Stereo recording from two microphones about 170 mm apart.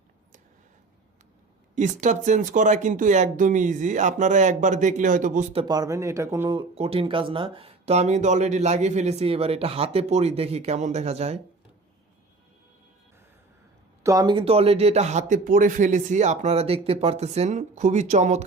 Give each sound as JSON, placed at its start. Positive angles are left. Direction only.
{"t": 1.7, "sound": "speech", "side_deg": -45}
{"t": 5.5, "sound": "speech", "side_deg": -25}
{"t": 6.6, "sound": "speech", "side_deg": -35}
{"t": 14.0, "sound": "speech", "side_deg": -20}